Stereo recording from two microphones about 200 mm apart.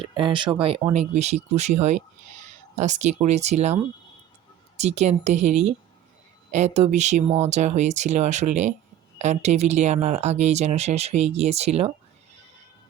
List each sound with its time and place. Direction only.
0.0 s speech: 25° right (ahead or behind)
4.8 s speech: 35° right (ahead or behind)